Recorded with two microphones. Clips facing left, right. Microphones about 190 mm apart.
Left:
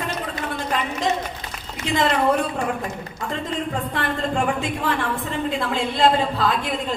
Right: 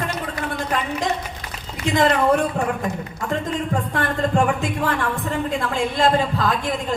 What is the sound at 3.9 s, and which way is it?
A woman's voice, 45° right (ahead or behind).